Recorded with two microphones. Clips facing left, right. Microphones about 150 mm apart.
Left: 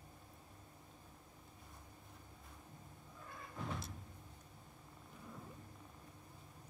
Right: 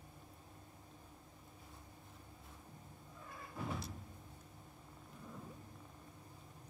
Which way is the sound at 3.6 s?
Centre (ahead or behind).